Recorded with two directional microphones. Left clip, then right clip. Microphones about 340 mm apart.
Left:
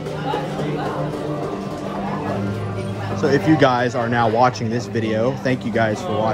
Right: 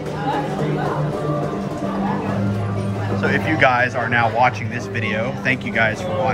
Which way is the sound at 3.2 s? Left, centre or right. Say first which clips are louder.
Left 1 dB; centre.